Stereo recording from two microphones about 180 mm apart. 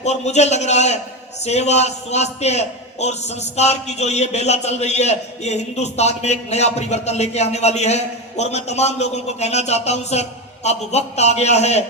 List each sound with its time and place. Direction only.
0.0 s a man's voice: 40° left (ahead or behind)